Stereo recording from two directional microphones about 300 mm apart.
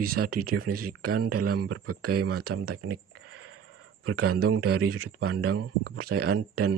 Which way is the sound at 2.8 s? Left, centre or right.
Right.